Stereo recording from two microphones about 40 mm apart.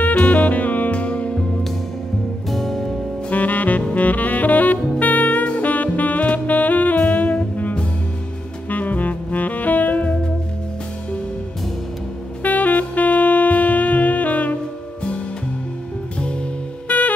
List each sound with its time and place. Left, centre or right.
0.2 s saxophone: left
2.5 s music: centre
3.3 s saxophone: left
12.4 s music: left
16.8 s music: left